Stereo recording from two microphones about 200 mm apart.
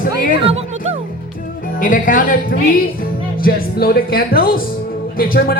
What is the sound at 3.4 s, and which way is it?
Speech, 50° left (ahead or behind).